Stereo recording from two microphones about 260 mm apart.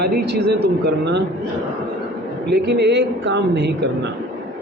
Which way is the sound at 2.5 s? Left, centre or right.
Right.